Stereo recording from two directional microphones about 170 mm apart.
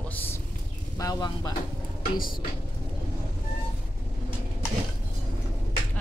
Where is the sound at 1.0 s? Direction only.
20° left (ahead or behind).